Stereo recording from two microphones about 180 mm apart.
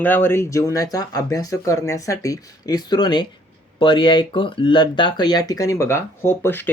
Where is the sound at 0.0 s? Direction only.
10° left (ahead or behind).